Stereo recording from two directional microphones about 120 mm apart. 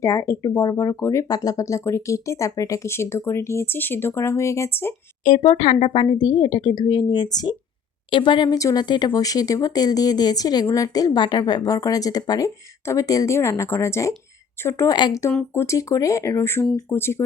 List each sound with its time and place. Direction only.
0.0 s speech: 25° left (ahead or behind)
5.4 s speech: 50° left (ahead or behind); by 17.2 s 20° left (ahead or behind)